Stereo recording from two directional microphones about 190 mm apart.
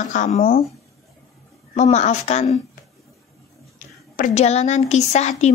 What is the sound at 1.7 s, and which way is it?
Speech, 35° left (ahead or behind).